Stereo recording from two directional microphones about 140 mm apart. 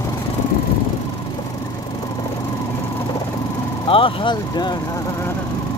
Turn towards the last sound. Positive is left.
turn(degrees=35)  # may be behind; listen again after turning